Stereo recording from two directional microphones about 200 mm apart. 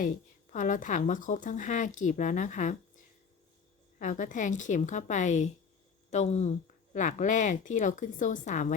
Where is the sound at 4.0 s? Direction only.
40° left (ahead or behind).